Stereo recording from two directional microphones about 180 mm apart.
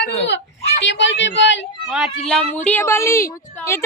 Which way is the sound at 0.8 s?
80° left.